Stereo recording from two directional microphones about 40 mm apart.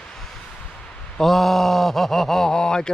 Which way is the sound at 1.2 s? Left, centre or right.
Centre.